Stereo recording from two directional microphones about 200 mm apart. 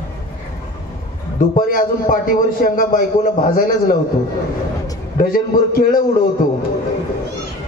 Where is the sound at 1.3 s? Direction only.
45° left (ahead or behind).